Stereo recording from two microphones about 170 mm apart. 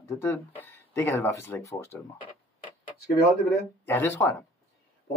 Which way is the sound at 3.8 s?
15° left (ahead or behind).